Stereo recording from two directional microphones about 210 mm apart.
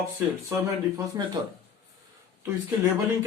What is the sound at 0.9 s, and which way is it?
Speech, 15° right (ahead or behind).